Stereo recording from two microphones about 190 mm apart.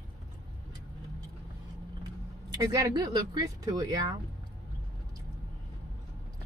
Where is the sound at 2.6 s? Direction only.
20° right (ahead or behind).